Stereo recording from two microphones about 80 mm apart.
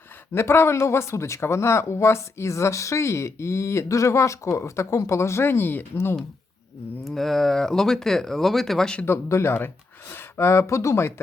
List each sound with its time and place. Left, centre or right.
0.3 s speech: left
7.0 s speech: centre
9.0 s speech: left